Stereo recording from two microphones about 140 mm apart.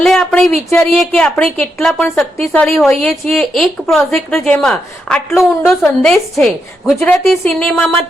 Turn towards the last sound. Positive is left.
turn(degrees=5)  # may be behind; listen again after turning